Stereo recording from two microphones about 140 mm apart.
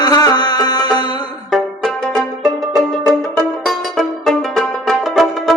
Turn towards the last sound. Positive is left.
turn(degrees=0)  # may be behind; listen again after turning